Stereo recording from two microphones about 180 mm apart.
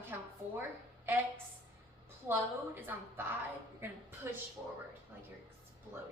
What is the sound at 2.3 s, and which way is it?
Speech, 10° right (ahead or behind).